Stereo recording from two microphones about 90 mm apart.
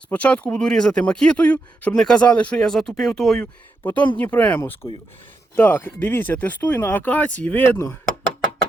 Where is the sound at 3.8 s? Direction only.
15° left (ahead or behind).